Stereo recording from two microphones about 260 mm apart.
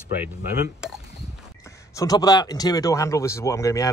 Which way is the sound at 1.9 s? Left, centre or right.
Centre.